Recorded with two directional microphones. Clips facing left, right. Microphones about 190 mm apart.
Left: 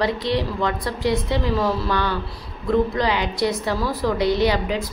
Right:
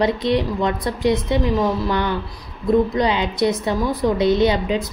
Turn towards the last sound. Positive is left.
turn(degrees=-20)  # may be behind; listen again after turning